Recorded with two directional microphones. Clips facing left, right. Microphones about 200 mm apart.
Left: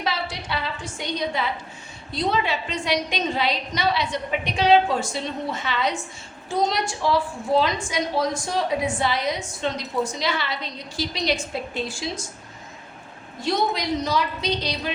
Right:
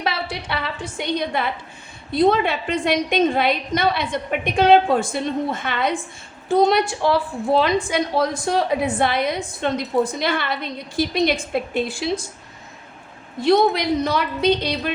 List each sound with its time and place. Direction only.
0.0 s a sound: 60° right (ahead or behind)
2.1 s a woman's voice: 55° right (ahead or behind)
13.4 s a woman's voice: 60° right (ahead or behind)